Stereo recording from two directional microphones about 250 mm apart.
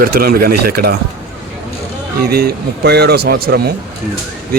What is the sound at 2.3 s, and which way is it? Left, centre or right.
Speech, right.